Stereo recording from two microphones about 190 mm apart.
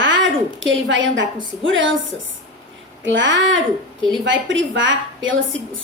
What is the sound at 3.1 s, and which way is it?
A child's voice, 75° right (ahead or behind).